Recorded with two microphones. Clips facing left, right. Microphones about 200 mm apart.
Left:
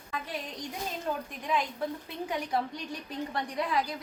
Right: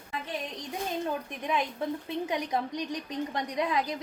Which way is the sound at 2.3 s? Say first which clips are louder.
Left 1 dB; 15° right (ahead or behind).